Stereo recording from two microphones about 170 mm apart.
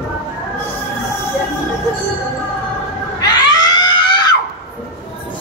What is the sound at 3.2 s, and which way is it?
Screaming, 25° left (ahead or behind).